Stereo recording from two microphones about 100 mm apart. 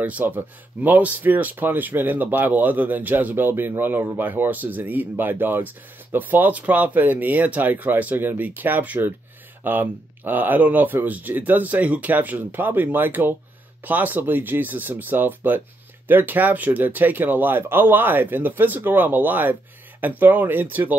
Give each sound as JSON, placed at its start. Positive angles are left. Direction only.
{"t": 0.0, "sound": "speech", "side_deg": -15}